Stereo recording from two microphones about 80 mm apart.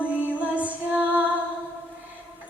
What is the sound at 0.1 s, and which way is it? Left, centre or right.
Music, centre.